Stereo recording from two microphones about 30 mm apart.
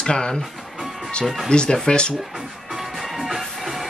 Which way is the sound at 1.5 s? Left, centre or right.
Left.